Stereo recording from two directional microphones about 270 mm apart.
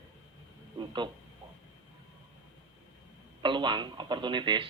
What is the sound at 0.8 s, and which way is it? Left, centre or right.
Speech, centre.